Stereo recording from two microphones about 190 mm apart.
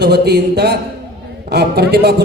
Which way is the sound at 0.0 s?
60° right (ahead or behind).